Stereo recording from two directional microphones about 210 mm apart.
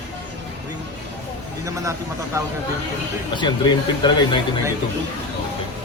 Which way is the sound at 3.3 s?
20° left (ahead or behind).